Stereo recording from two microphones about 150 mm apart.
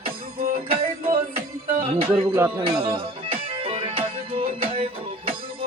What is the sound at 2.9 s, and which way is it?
Music, 35° right (ahead or behind).